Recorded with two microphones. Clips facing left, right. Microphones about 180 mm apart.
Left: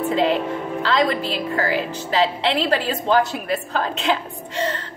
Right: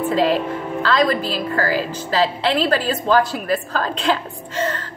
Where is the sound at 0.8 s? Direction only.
20° left (ahead or behind).